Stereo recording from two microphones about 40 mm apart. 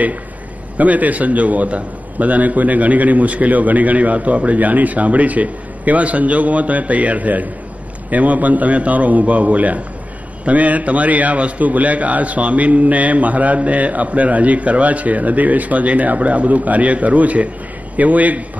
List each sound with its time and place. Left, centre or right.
0.7 s a man's voice: right